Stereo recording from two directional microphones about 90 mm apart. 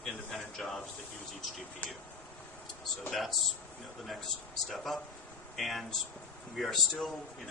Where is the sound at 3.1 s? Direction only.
Centre (ahead or behind).